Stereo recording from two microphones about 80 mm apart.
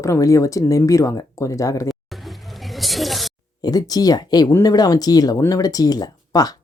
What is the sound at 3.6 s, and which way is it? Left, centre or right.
Speech, left.